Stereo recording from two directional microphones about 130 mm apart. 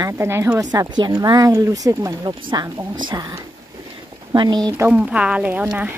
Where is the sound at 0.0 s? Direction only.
20° right (ahead or behind).